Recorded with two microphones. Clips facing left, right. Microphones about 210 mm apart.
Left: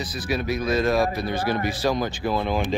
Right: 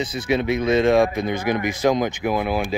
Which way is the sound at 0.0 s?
25° right (ahead or behind).